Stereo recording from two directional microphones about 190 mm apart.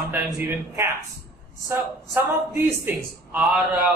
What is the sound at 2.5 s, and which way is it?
A man's voice, 10° right (ahead or behind).